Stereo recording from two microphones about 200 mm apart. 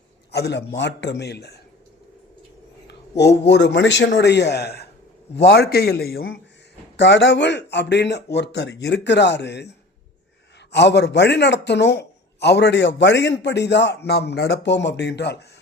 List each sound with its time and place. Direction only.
0.3 s a man's voice: 55° left (ahead or behind)
2.8 s a man's voice: 60° left (ahead or behind)